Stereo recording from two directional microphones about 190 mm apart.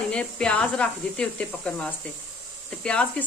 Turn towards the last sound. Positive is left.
turn(degrees=5)  # may be behind; listen again after turning